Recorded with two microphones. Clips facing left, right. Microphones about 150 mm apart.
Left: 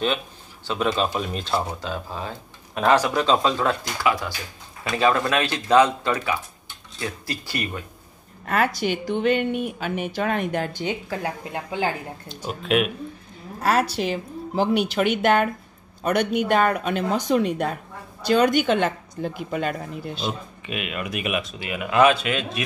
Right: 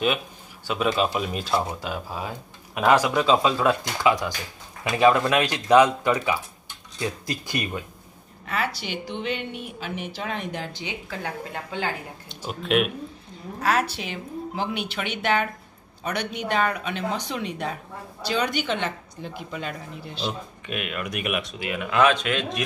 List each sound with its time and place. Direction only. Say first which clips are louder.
0.7 s speech: even; 5° right (ahead or behind)
4.0 s speech: right 2 dB; 20° right (ahead or behind)
8.5 s speech: left 6 dB; 50° left (ahead or behind)
12.3 s speech: left 1 dB; centre (ahead or behind)
13.6 s a woman's voice: left 3 dB; 40° left (ahead or behind)
20.6 s speech: left 1 dB; centre (ahead or behind)